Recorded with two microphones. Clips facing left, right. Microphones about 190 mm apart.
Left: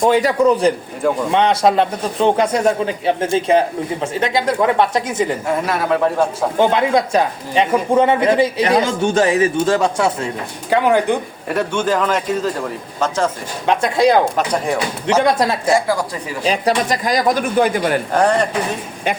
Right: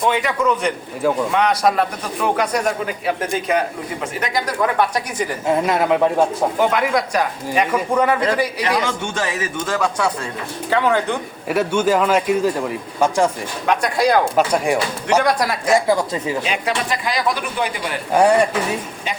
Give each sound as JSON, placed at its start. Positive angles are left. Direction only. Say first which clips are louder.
{"t": 0.0, "sound": "a man's voice", "louder": "left 5 dB", "side_deg": 35}
{"t": 5.6, "sound": "a woman's voice", "louder": "right 1 dB", "side_deg": -20}
{"t": 6.6, "sound": "speech", "louder": "left 5 dB", "side_deg": 25}
{"t": 11.4, "sound": "a man's voice", "louder": "right 2 dB", "side_deg": -10}
{"t": 13.7, "sound": "speech", "louder": "left 3 dB", "side_deg": 25}
{"t": 14.3, "sound": "a man's voice", "louder": "right 2 dB", "side_deg": -10}
{"t": 15.2, "sound": "speech", "louder": "left 3 dB", "side_deg": 25}
{"t": 15.7, "sound": "a woman's voice", "louder": "right 1 dB", "side_deg": -20}
{"t": 16.4, "sound": "speech", "louder": "left 5 dB", "side_deg": 40}
{"t": 18.1, "sound": "a man's voice", "louder": "right 5 dB", "side_deg": -10}